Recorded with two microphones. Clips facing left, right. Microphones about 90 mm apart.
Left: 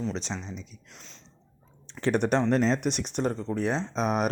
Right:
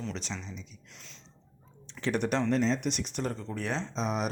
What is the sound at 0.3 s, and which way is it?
Speech, 30° left (ahead or behind).